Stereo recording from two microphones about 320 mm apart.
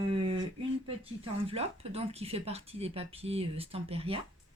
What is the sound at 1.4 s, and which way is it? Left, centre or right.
Speech, centre.